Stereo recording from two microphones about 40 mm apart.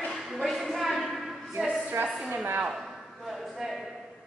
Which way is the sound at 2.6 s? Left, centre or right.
Centre.